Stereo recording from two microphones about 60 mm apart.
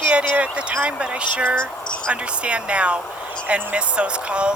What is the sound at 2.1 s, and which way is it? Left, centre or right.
Speech, centre.